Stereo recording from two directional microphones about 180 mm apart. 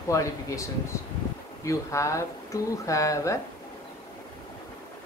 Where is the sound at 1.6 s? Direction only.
15° left (ahead or behind).